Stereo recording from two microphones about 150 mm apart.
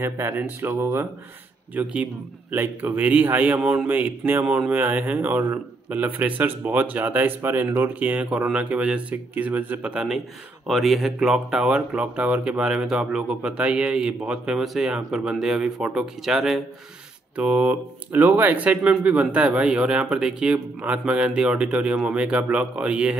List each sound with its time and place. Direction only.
0.0 s a man's voice: 15° right (ahead or behind)